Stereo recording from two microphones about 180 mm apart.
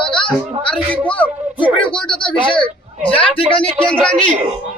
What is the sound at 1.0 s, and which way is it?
Speech, 10° left (ahead or behind).